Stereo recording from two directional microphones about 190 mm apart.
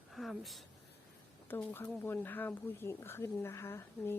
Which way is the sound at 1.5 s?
10° left (ahead or behind).